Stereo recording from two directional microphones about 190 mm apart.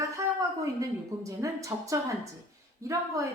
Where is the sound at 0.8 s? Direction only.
15° right (ahead or behind).